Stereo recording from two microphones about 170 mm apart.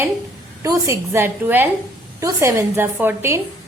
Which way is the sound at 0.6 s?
15° right (ahead or behind).